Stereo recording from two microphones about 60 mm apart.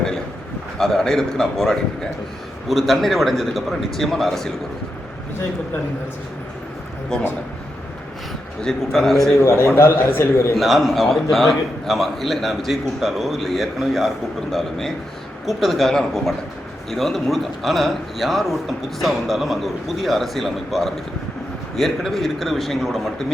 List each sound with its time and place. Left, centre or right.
0.8 s a man's voice: centre
8.6 s a man's voice: centre
9.4 s a man's voice: left
10.6 s a man's voice: centre